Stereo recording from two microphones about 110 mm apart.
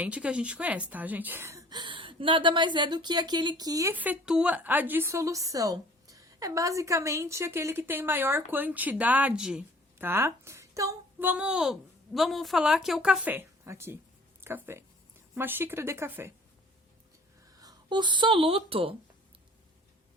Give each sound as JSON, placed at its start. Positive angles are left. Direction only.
{"t": 0.0, "sound": "a woman's voice", "side_deg": -10}
{"t": 1.7, "sound": "a woman's voice", "side_deg": -45}
{"t": 3.9, "sound": "a woman's voice", "side_deg": -15}
{"t": 10.0, "sound": "speech", "side_deg": -20}
{"t": 11.2, "sound": "a woman's voice", "side_deg": -15}
{"t": 17.6, "sound": "speech", "side_deg": -40}